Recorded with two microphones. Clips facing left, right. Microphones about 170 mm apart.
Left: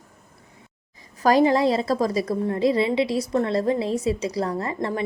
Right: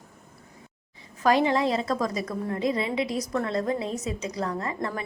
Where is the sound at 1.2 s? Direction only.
40° left (ahead or behind).